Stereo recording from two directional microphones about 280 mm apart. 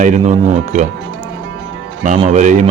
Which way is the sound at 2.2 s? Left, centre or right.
Right.